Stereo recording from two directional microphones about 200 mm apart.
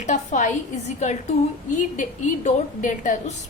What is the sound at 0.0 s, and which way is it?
A woman's voice, 35° left (ahead or behind).